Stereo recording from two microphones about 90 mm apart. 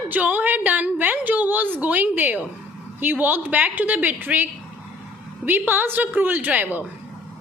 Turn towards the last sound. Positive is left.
turn(degrees=-20)  # may be behind; listen again after turning